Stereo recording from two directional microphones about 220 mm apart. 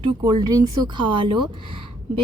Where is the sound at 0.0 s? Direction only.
20° right (ahead or behind).